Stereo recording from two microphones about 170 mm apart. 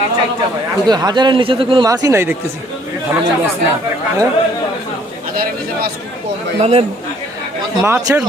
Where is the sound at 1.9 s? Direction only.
20° right (ahead or behind).